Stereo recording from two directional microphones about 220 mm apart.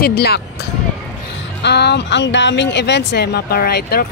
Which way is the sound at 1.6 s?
50° left (ahead or behind).